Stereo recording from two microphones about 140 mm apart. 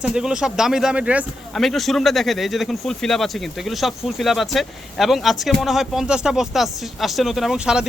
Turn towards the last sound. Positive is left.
turn(degrees=-5)  # may be behind; listen again after turning